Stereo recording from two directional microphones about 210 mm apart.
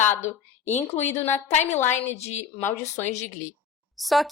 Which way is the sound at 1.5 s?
30° left (ahead or behind).